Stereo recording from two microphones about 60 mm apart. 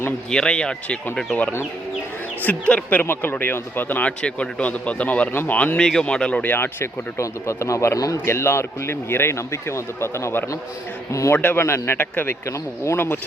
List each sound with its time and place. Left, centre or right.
0.3 s speech: centre
2.4 s speech: left
3.0 s speech: left
4.2 s speech: centre
5.7 s speech: centre
6.4 s speech: left
7.2 s speech: left
8.2 s speech: left
11.3 s speech: left
12.5 s speech: left